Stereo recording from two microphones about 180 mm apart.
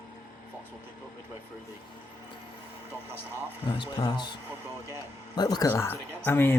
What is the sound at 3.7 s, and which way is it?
A man's voice, 30° left (ahead or behind).